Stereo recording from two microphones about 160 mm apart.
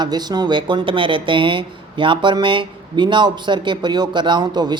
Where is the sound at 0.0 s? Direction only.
25° right (ahead or behind).